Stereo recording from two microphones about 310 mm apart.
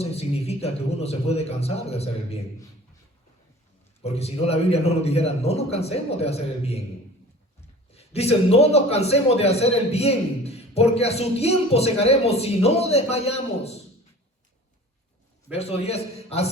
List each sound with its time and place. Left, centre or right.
0.0 s a man's voice: centre
4.0 s a man's voice: centre
7.9 s a man's voice: centre
15.5 s a man's voice: centre